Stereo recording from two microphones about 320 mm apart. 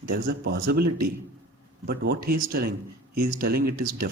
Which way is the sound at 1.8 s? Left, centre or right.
Right.